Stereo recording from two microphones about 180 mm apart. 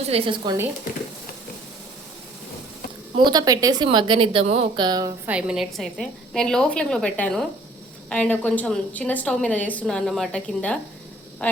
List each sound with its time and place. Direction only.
0.1 s a woman's voice: 30° right (ahead or behind)
3.2 s a woman's voice: 25° right (ahead or behind)
5.2 s a woman's voice: 5° right (ahead or behind)